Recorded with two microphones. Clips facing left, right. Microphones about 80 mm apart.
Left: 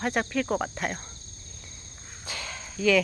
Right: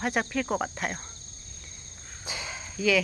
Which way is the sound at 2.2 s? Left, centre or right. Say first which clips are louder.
Even; centre.